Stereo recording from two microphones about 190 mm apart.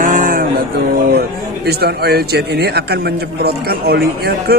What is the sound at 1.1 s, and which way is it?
A man's voice, 55° right (ahead or behind).